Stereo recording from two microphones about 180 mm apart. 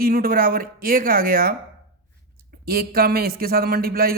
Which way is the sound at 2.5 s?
60° right (ahead or behind).